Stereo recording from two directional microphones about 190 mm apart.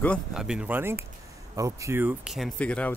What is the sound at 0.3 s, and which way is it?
Speech, 5° right (ahead or behind).